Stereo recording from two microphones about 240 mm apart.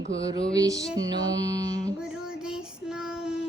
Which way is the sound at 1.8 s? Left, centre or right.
Centre.